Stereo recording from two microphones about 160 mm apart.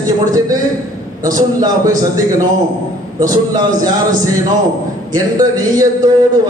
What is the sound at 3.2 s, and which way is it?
Speech, 25° right (ahead or behind).